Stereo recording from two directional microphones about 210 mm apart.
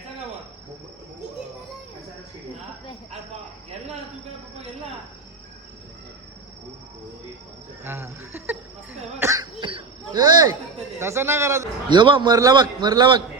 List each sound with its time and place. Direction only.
7.9 s a sound: 10° right (ahead or behind)
9.1 s cough: 15° right (ahead or behind)
11.0 s a man's voice: 10° right (ahead or behind)